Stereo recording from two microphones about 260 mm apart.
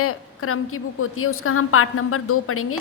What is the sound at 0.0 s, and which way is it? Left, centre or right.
A woman's voice, left.